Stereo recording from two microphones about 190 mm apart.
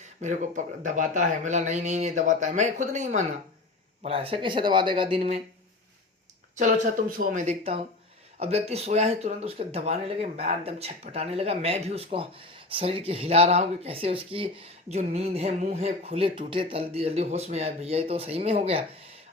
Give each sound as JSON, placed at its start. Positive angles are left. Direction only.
{"t": 0.0, "sound": "speech", "side_deg": -40}
{"t": 6.6, "sound": "speech", "side_deg": -45}